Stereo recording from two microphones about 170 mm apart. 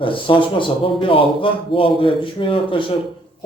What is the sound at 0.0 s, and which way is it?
Speech, 30° left (ahead or behind).